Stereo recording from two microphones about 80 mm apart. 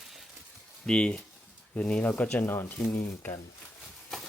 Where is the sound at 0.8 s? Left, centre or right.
Centre.